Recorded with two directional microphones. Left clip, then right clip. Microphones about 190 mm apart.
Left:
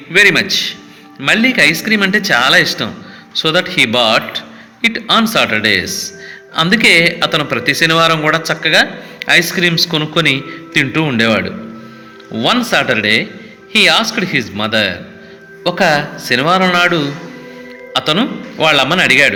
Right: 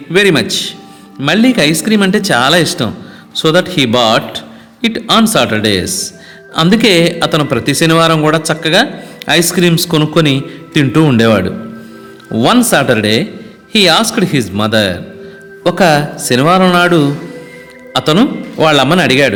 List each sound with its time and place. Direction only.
0.1 s a man's voice: 40° right (ahead or behind)